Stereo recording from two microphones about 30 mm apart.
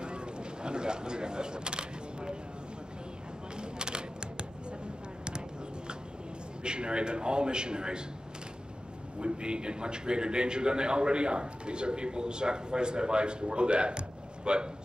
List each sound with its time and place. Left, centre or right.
0.0 s single-lens reflex camera: right
3.7 s a sound: right
6.6 s a man's voice: right
9.2 s a man's voice: right